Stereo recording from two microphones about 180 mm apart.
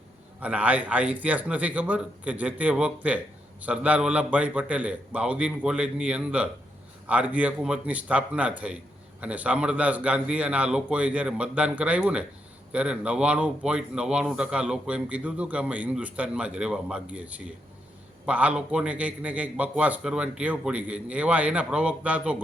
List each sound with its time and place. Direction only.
0.3 s a man's voice: 10° right (ahead or behind)